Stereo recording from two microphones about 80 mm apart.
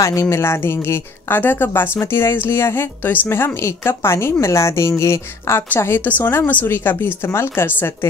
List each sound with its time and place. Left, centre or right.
0.0 s speech: left